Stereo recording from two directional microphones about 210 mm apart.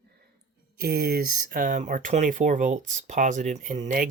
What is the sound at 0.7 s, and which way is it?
Speech, 45° right (ahead or behind).